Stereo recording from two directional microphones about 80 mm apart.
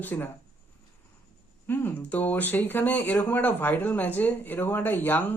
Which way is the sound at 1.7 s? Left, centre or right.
Left.